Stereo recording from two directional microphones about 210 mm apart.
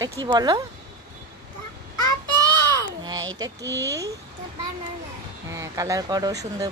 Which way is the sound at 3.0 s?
20° right (ahead or behind).